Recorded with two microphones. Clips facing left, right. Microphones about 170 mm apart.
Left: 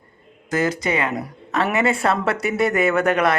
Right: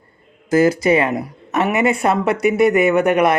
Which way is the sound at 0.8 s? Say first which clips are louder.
Right 7 dB; 25° right (ahead or behind).